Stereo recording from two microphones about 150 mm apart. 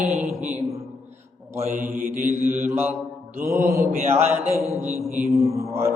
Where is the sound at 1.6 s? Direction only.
65° right (ahead or behind).